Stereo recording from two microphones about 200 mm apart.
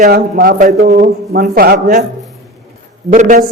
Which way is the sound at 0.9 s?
35° right (ahead or behind).